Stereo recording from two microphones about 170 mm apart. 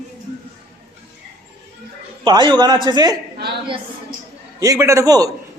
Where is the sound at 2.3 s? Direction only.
25° right (ahead or behind).